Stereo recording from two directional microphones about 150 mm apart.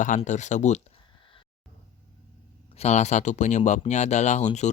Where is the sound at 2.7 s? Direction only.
45° left (ahead or behind).